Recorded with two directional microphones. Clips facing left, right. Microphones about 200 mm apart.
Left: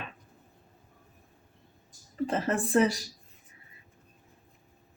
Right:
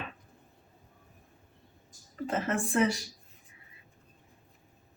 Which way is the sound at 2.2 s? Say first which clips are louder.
Left 2 dB; 35° left (ahead or behind).